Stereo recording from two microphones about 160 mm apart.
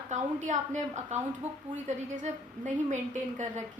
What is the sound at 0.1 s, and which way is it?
A woman's voice, 50° right (ahead or behind).